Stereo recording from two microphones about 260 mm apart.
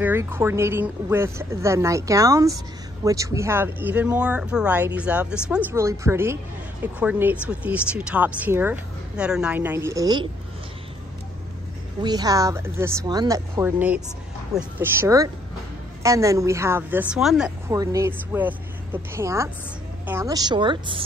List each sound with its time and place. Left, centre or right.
0.0 s speech: centre
12.0 s speech: centre